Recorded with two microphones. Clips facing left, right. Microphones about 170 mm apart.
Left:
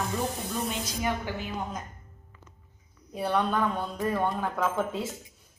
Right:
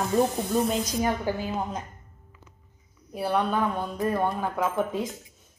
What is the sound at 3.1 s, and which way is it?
Speech, 10° right (ahead or behind).